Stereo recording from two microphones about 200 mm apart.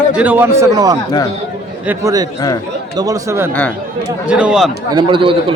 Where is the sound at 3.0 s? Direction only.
15° right (ahead or behind).